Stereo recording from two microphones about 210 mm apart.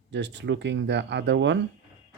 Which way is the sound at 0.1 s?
55° right (ahead or behind).